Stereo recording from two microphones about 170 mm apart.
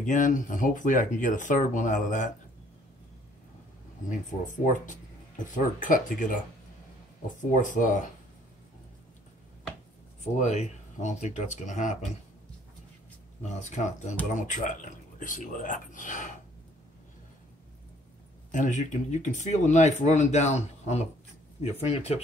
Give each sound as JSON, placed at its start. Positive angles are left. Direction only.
{"t": 0.0, "sound": "speech", "side_deg": 50}
{"t": 4.1, "sound": "speech", "side_deg": 50}
{"t": 7.5, "sound": "speech", "side_deg": 50}
{"t": 10.2, "sound": "speech", "side_deg": 45}
{"t": 13.5, "sound": "speech", "side_deg": 45}
{"t": 18.5, "sound": "speech", "side_deg": 45}